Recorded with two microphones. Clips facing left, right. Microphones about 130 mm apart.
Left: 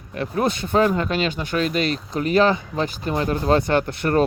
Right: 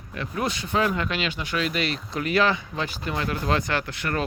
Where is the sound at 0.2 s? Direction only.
45° left (ahead or behind).